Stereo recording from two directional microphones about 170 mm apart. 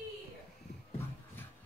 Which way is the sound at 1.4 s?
10° left (ahead or behind).